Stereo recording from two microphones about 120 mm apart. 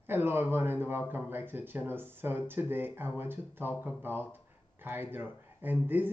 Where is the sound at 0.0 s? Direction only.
15° right (ahead or behind).